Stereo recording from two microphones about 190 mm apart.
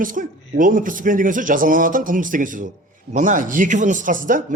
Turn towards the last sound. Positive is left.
turn(degrees=-45)  # may be behind; listen again after turning